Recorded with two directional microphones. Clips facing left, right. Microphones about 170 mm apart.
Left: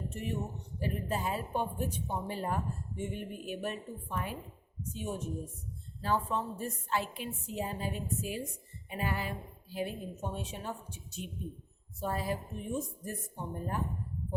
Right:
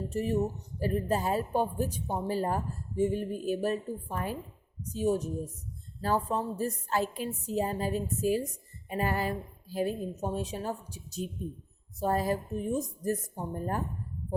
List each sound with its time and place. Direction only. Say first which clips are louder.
0.1 s a woman's voice: right 12 dB; 35° right (ahead or behind)